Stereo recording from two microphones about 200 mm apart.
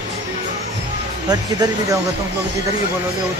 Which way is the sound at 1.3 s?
20° right (ahead or behind).